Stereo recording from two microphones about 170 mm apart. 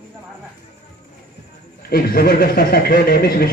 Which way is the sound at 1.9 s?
60° left (ahead or behind).